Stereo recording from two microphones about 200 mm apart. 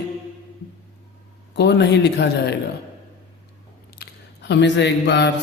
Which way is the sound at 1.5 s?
60° left (ahead or behind).